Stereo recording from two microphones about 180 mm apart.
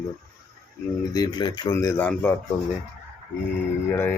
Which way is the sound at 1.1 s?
20° left (ahead or behind).